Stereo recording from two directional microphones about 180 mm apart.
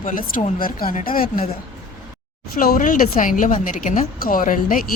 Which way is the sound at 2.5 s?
55° left (ahead or behind).